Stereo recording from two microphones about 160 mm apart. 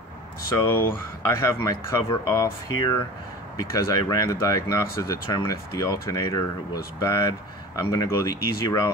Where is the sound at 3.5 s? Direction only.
20° left (ahead or behind).